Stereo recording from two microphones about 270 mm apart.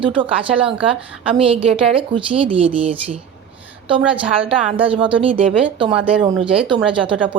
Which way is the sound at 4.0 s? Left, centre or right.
Centre.